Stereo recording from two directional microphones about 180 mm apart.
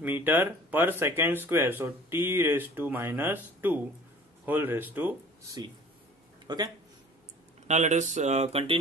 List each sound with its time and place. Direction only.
0.0 s speech: 10° right (ahead or behind)
6.4 s speech: 20° right (ahead or behind)
7.6 s speech: 40° right (ahead or behind)